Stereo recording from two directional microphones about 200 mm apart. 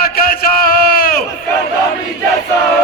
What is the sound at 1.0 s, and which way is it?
Battle cry, 45° left (ahead or behind).